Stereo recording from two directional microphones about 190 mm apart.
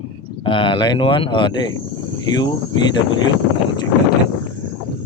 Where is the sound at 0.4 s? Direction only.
25° left (ahead or behind).